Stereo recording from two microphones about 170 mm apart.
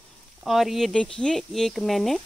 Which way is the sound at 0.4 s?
Centre (ahead or behind).